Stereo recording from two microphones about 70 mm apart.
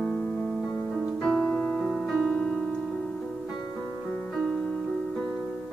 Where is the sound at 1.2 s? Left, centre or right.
Centre.